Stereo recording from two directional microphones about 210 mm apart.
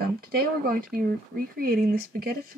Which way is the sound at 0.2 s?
45° right (ahead or behind).